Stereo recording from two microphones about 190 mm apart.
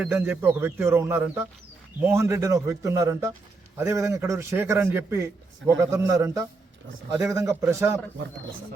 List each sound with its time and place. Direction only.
0.0 s a man's voice: 10° right (ahead or behind)